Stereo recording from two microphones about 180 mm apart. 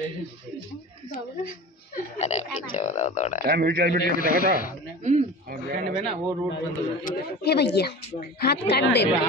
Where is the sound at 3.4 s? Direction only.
60° right (ahead or behind).